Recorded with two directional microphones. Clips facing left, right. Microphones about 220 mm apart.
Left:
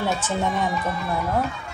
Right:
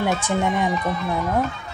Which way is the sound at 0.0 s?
15° right (ahead or behind).